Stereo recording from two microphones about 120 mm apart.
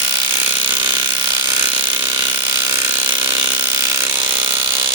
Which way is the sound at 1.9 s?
40° right (ahead or behind).